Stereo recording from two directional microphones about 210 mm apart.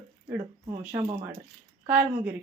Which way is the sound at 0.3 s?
10° right (ahead or behind).